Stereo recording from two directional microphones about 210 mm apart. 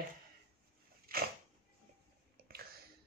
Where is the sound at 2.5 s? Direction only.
45° right (ahead or behind).